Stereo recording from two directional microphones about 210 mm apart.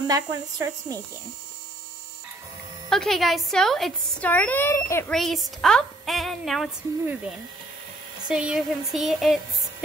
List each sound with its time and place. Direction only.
0.0 s speech: 15° right (ahead or behind)
2.9 s a woman's voice: centre (ahead or behind)
5.1 s a woman's voice: centre (ahead or behind)
8.3 s a woman's voice: 5° right (ahead or behind)